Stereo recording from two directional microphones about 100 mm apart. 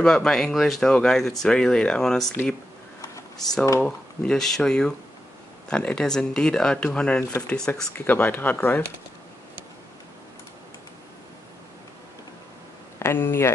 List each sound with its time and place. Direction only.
0.0 s speech: 5° left (ahead or behind)
3.8 s speech: 10° left (ahead or behind)
8.1 s speech: 20° left (ahead or behind)
13.0 s speech: 25° left (ahead or behind)